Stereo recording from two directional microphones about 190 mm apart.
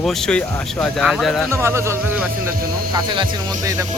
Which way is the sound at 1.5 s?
15° right (ahead or behind).